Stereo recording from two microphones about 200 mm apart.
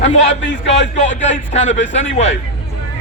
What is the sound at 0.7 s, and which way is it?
A man's voice, 35° left (ahead or behind).